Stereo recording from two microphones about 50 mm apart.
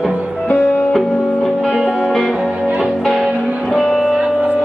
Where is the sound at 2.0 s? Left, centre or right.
Centre.